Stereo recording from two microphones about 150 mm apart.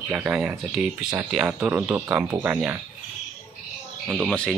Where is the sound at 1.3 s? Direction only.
10° right (ahead or behind).